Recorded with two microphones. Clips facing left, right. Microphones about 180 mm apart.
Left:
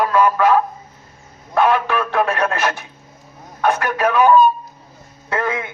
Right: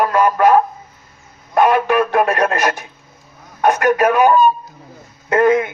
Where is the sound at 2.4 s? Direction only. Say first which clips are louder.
Right 3 dB; 40° right (ahead or behind).